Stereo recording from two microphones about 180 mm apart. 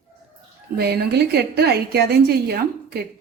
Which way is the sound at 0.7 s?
60° right (ahead or behind).